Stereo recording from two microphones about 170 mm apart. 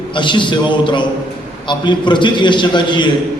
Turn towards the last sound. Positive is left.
turn(degrees=25)  # may be behind; listen again after turning